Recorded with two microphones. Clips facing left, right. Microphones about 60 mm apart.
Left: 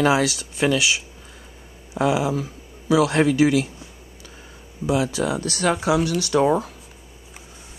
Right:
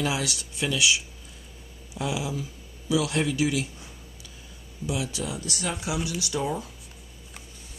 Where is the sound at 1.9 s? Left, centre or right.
Left.